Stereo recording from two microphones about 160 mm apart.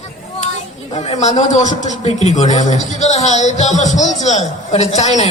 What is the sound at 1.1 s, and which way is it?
Speech, 45° left (ahead or behind).